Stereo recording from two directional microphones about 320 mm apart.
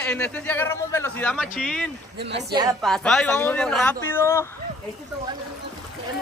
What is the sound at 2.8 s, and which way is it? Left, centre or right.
A man's voice, centre.